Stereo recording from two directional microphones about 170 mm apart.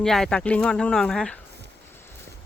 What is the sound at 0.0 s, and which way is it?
Speech, 5° left (ahead or behind).